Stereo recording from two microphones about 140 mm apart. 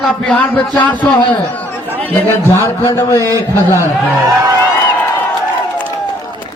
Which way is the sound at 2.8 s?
25° left (ahead or behind).